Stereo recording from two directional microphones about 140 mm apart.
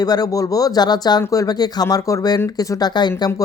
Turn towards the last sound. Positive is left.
turn(degrees=30)  # may be behind; listen again after turning